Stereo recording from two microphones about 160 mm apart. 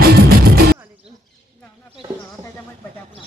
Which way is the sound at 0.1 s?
70° right (ahead or behind).